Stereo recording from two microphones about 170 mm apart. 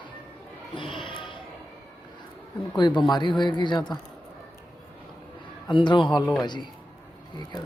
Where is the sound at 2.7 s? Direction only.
25° left (ahead or behind).